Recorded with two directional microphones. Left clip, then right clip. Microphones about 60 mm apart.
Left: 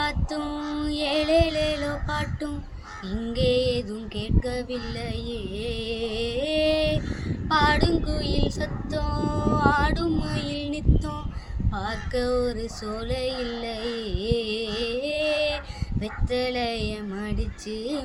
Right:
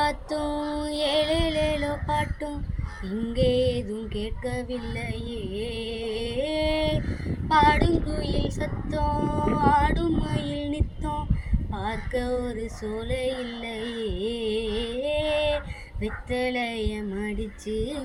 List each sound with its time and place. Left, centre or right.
1.0 s female singing: left
5.3 s music: left
7.5 s female singing: left
13.9 s a sound: left
16.3 s female singing: left